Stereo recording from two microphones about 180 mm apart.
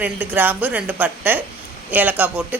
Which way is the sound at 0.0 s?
10° right (ahead or behind).